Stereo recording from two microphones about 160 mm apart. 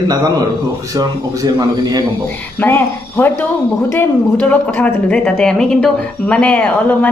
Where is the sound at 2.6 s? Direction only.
15° left (ahead or behind).